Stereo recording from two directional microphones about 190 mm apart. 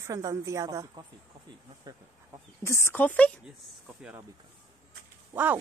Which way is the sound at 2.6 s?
15° left (ahead or behind).